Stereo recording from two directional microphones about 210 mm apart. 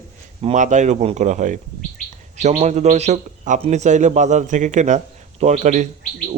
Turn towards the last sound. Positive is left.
turn(degrees=-35)  # may be behind; listen again after turning